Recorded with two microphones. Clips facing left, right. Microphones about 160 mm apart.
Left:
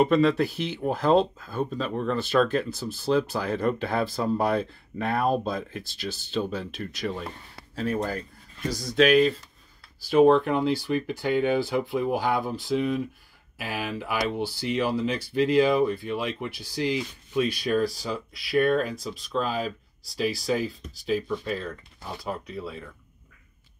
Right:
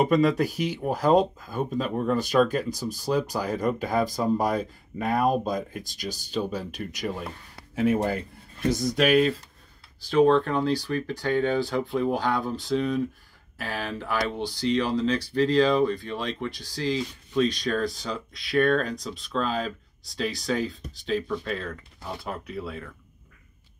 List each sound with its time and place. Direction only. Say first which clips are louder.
0.2 s speech: even; 10° right (ahead or behind)
7.7 s speech: right 4 dB; 20° right (ahead or behind)
8.9 s speech: left 3 dB; 5° right (ahead or behind)
10.0 s speech: left 2 dB; 15° left (ahead or behind)